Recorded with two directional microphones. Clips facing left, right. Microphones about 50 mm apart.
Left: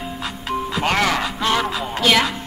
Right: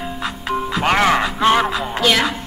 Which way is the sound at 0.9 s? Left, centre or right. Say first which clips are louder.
Right 4 dB; right.